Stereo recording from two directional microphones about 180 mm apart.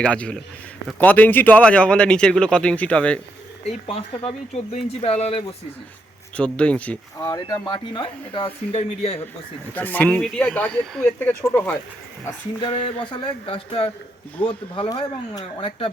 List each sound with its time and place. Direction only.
0.0 s a man's voice: 5° left (ahead or behind)
3.7 s speech: 30° left (ahead or behind)
6.3 s a man's voice: 5° left (ahead or behind)
7.2 s speech: 20° left (ahead or behind)
9.7 s a man's voice: 10° left (ahead or behind)
12.5 s speech: 30° left (ahead or behind)